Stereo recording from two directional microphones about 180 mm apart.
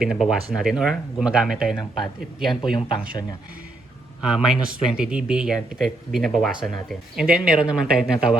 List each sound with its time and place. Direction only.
0.0 s speech: 5° right (ahead or behind)
2.7 s speech: 25° left (ahead or behind)
4.3 s speech: 5° right (ahead or behind)